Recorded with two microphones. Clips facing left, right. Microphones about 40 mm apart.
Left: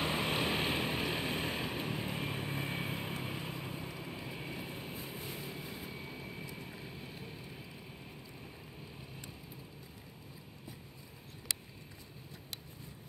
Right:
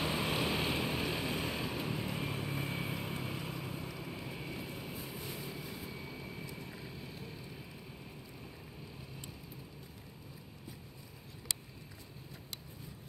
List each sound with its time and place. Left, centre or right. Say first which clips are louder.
0.0 s vehicle: left 1 dB; left